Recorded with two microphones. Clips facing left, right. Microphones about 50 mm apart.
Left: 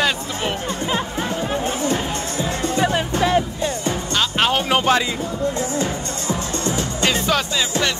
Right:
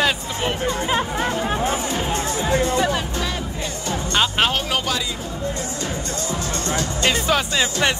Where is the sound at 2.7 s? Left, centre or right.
Centre.